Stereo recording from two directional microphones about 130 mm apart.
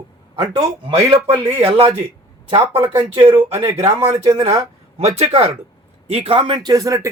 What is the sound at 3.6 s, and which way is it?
Speech, 20° right (ahead or behind).